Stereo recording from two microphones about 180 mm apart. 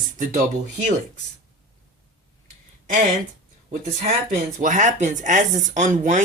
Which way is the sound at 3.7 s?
45° right (ahead or behind).